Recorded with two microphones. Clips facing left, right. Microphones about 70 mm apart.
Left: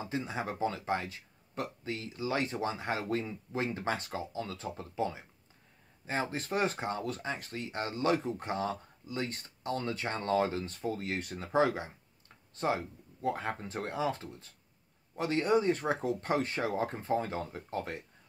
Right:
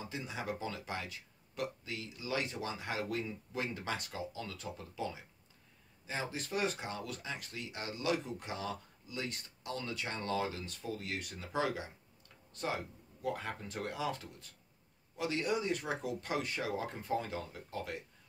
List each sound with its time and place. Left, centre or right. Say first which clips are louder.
0.0 s speech: left 6 dB; left